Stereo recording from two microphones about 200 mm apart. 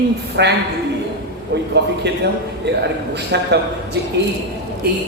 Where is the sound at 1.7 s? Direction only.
60° right (ahead or behind).